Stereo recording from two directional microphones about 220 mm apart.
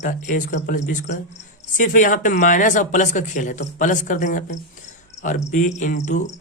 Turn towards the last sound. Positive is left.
turn(degrees=35)  # may be behind; listen again after turning